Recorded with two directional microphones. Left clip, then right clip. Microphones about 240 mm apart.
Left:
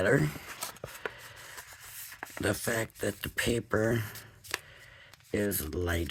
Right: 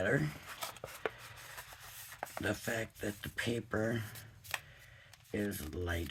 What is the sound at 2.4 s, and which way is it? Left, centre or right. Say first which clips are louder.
Speech: left 7 dB; left.